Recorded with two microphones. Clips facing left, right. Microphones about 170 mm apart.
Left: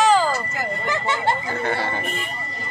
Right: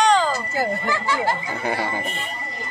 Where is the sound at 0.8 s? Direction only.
20° left (ahead or behind).